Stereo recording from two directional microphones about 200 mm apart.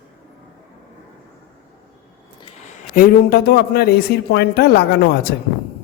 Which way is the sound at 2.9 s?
45° left (ahead or behind).